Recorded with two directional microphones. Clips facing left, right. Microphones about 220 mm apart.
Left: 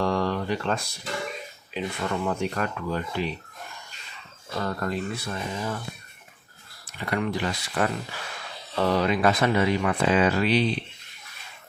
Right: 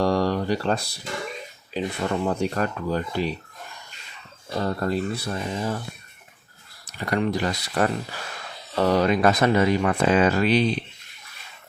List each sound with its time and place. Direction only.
0.0 s speech: 35° right (ahead or behind)
4.5 s speech: 30° right (ahead or behind)
6.8 s speech: 40° right (ahead or behind)